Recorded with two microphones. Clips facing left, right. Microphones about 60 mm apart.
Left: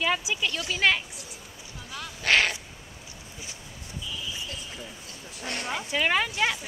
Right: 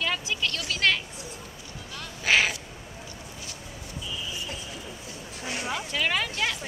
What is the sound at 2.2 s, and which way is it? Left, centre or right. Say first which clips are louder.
Bird: even; centre.